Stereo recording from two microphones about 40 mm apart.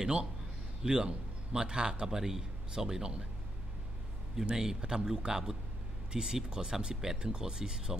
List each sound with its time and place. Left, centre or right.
0.8 s a man's voice: centre
4.5 s a man's voice: centre